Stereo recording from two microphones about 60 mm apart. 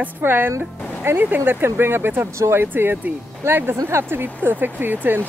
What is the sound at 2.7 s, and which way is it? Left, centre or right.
Speech, right.